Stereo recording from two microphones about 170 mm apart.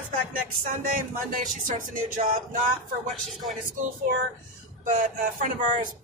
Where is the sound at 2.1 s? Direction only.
55° right (ahead or behind).